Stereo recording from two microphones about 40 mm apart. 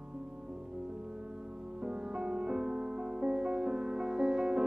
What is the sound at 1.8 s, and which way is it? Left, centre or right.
Music, right.